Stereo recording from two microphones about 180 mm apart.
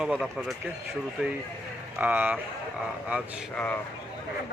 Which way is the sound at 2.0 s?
10° right (ahead or behind).